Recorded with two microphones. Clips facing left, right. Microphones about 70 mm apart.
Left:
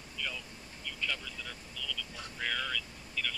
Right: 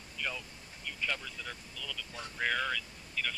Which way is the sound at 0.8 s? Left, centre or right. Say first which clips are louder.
Right 1 dB; right.